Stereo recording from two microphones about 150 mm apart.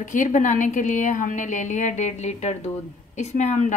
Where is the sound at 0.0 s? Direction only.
55° left (ahead or behind).